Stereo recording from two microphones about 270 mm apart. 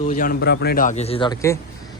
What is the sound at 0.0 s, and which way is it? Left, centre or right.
A man's voice, left.